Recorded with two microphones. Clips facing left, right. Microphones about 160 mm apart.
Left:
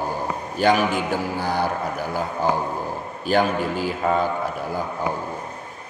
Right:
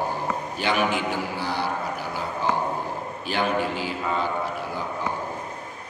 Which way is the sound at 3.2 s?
45° left (ahead or behind).